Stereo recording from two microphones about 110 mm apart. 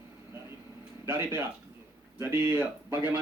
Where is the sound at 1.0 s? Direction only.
20° right (ahead or behind).